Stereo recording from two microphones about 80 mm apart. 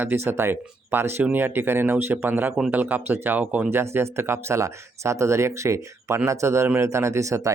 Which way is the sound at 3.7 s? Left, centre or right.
Right.